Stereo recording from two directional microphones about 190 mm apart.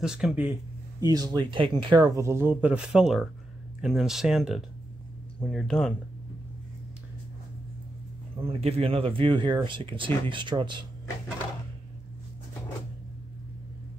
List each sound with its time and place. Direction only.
0.0 s speech: 5° right (ahead or behind)
1.0 s speech: 20° right (ahead or behind); by 5.9 s 5° left (ahead or behind)
8.4 s speech: 30° right (ahead or behind)